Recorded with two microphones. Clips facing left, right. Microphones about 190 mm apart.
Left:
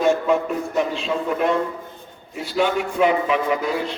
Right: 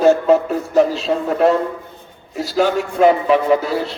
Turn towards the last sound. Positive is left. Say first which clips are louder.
# right 6 dB
turn(degrees=-35)  # may be behind; listen again after turning